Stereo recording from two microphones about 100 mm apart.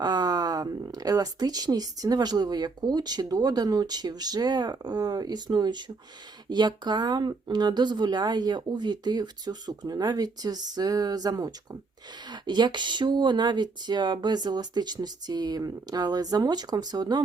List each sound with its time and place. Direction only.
0.0 s speech: 40° right (ahead or behind)